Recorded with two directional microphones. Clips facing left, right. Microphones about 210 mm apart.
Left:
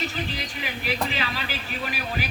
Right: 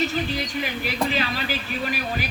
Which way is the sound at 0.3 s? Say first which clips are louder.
Right 6 dB; 40° right (ahead or behind).